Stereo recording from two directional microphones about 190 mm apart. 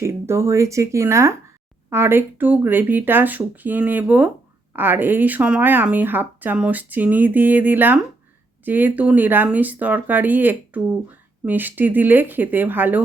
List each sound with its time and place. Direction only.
0.0 s speech: 15° right (ahead or behind)